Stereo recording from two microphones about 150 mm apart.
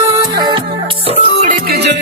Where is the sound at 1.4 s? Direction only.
75° right (ahead or behind).